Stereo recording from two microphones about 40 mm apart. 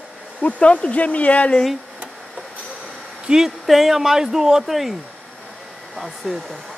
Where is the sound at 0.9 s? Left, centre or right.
Left.